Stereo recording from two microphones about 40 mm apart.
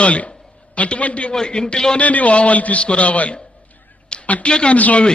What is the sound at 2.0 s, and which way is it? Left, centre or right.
A man's voice, left.